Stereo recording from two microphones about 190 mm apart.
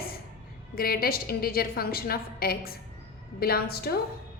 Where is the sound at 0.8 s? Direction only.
50° left (ahead or behind).